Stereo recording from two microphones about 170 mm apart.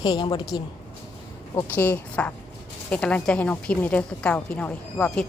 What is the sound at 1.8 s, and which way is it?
A woman's voice, 10° left (ahead or behind).